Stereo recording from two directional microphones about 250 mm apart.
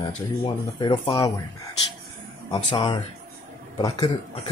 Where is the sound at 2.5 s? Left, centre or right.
Centre.